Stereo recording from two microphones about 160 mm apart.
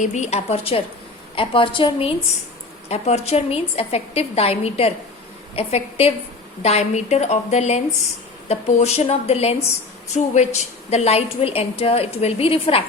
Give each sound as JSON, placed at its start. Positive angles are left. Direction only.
{"t": 0.0, "sound": "a woman's voice", "side_deg": 45}